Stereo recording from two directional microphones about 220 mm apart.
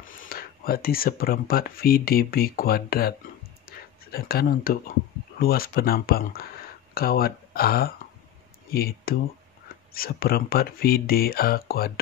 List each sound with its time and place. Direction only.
0.0 s speech: 40° left (ahead or behind)